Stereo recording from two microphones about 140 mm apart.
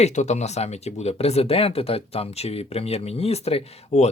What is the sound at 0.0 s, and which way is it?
Speech, 55° left (ahead or behind).